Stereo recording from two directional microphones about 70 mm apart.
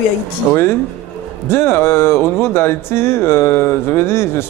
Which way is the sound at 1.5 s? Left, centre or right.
Left.